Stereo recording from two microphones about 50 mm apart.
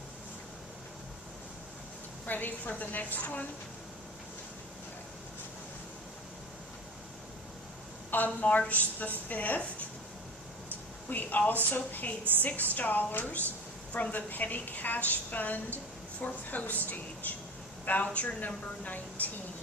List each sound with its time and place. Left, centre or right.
2.2 s a woman's voice: left
8.1 s a woman's voice: left
11.1 s a woman's voice: left